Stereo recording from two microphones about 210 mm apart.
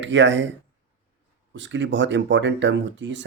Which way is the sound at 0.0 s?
60° right (ahead or behind).